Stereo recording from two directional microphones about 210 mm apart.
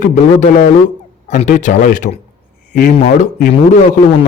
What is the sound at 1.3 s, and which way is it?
A man's voice, 35° left (ahead or behind).